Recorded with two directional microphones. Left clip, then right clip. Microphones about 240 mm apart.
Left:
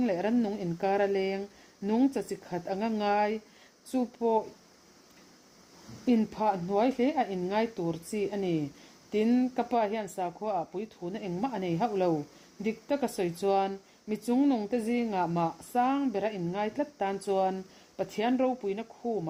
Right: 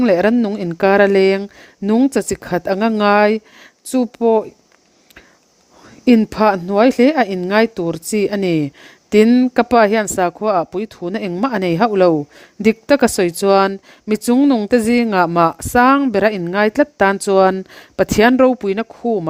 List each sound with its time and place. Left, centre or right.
0.0 s speech: right
6.1 s speech: right